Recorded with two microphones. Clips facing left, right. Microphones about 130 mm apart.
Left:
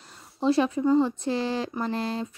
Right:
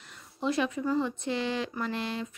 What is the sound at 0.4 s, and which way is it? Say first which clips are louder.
Speech: left 6 dB; 30° left (ahead or behind).